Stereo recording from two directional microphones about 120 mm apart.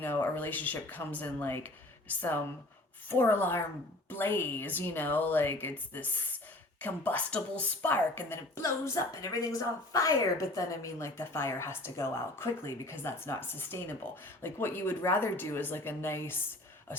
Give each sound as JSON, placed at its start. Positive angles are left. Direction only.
{"t": 0.0, "sound": "speech", "side_deg": 15}